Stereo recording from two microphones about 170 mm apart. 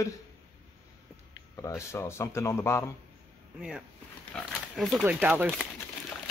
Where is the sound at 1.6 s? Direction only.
15° left (ahead or behind).